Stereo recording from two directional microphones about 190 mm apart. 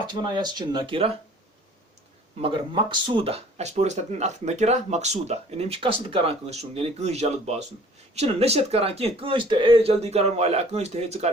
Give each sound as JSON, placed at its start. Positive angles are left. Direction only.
{"t": 0.1, "sound": "speech", "side_deg": -25}
{"t": 2.4, "sound": "speech", "side_deg": -25}